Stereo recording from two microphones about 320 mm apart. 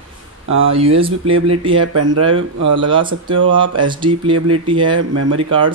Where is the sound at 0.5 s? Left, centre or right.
Right.